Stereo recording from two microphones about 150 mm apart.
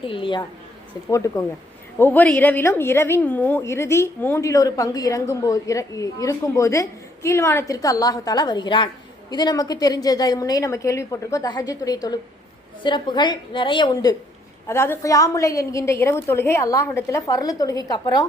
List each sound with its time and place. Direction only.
0.0 s a woman's voice: 35° left (ahead or behind)
1.1 s a woman's voice: 20° left (ahead or behind)